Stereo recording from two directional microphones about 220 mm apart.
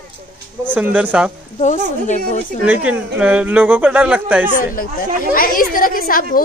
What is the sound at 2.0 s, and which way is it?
Speech, 35° left (ahead or behind).